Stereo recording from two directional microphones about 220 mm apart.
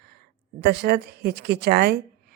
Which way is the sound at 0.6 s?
45° right (ahead or behind).